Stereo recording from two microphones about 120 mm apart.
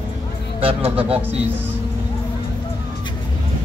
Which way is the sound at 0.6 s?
50° right (ahead or behind).